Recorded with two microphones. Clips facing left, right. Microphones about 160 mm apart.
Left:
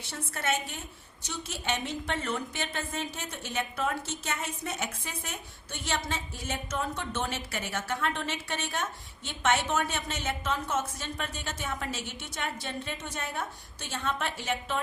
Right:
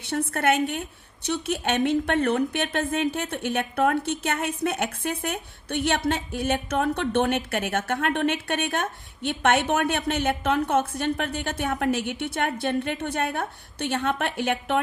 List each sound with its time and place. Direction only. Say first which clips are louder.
0.0 s a woman's voice: right 10 dB; 60° right (ahead or behind)